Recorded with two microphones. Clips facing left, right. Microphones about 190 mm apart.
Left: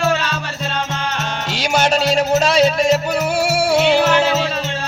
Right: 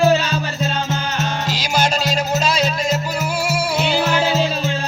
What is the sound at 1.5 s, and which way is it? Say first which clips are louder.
Music: left 5 dB; 65° left (ahead or behind).